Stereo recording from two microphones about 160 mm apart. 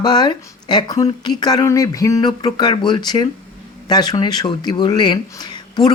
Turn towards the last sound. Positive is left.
turn(degrees=25)  # may be behind; listen again after turning